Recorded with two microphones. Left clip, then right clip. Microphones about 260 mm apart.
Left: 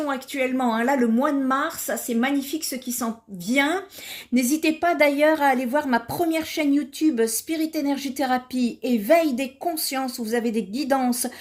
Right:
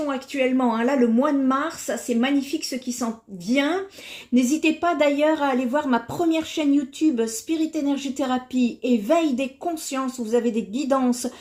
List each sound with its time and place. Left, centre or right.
0.1 s speech: left